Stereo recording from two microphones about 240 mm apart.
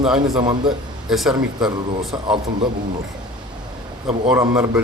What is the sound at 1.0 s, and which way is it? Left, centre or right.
Speech, centre.